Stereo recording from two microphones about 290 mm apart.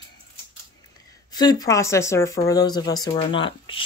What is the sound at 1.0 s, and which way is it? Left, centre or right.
Speech, centre.